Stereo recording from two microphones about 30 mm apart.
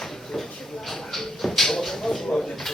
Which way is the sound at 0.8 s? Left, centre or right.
Centre.